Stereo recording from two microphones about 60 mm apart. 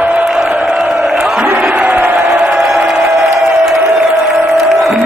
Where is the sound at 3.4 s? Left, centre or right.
Centre.